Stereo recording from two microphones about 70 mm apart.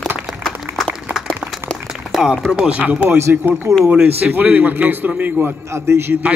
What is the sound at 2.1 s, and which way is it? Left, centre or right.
Speech, centre.